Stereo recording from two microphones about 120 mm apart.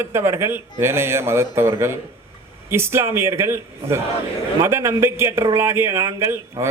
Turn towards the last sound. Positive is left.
turn(degrees=-20)  # may be behind; listen again after turning